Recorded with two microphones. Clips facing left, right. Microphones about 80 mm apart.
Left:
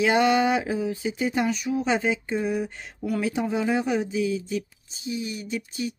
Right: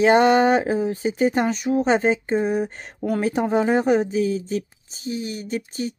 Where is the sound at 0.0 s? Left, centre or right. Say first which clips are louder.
Right 5 dB; right.